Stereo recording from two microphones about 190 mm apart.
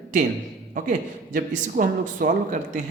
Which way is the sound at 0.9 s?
45° right (ahead or behind).